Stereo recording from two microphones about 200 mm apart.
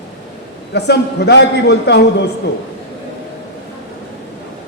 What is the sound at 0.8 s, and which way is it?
A man's voice, 55° left (ahead or behind).